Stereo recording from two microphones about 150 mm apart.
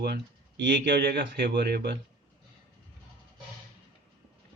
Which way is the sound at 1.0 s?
90° right.